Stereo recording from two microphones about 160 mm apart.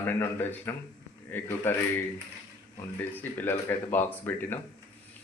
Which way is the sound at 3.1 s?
10° left (ahead or behind).